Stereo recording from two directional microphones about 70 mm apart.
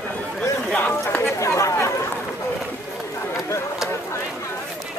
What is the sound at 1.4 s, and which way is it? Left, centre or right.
Chatter, left.